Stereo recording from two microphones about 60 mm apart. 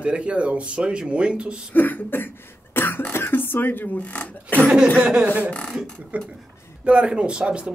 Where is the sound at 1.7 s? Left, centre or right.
Left.